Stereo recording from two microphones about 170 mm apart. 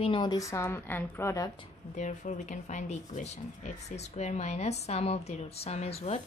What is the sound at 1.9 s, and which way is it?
Speech, 45° left (ahead or behind).